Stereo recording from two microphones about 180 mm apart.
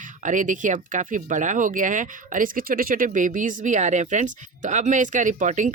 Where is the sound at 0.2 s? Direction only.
45° right (ahead or behind).